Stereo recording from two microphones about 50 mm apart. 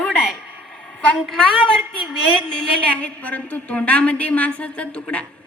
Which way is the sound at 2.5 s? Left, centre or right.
Centre.